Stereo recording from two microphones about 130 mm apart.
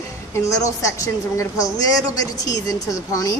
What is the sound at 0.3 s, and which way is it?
A woman's voice, 25° left (ahead or behind).